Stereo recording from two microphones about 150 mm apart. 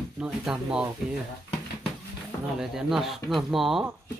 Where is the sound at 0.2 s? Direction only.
5° right (ahead or behind).